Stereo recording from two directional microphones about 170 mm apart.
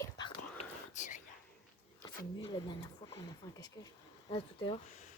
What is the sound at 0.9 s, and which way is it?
Whispering, 45° left (ahead or behind).